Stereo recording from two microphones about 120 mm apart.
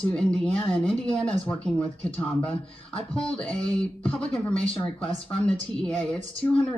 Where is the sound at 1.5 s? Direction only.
25° left (ahead or behind).